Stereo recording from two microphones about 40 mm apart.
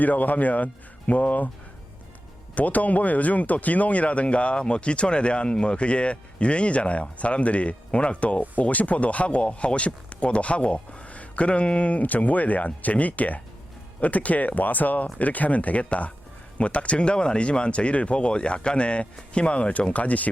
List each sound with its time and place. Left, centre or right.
0.0 s speech: left
2.6 s speech: left